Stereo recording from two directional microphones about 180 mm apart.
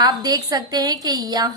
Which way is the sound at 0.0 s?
20° right (ahead or behind).